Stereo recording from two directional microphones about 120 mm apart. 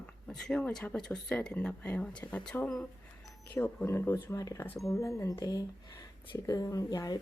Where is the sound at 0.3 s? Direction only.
5° left (ahead or behind).